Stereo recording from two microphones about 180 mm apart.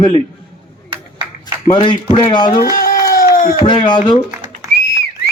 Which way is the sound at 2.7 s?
55° left (ahead or behind).